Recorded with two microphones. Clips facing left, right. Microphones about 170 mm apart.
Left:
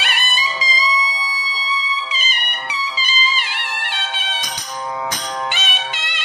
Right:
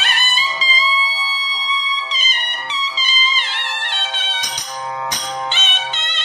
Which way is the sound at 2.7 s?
10° left (ahead or behind).